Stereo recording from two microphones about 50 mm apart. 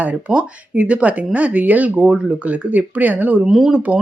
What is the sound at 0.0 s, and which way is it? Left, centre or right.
Speech, right.